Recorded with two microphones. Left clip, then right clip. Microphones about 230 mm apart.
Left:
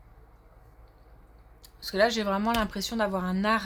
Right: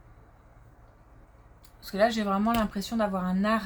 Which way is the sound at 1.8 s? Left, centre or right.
Left.